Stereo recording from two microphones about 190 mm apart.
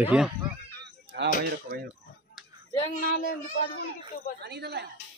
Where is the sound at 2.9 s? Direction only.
45° left (ahead or behind).